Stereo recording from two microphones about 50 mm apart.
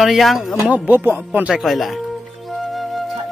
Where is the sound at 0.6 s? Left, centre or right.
Right.